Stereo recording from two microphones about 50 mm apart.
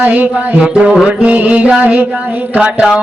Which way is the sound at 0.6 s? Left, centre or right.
Right.